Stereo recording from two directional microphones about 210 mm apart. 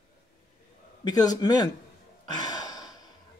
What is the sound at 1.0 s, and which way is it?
Speech, 20° left (ahead or behind).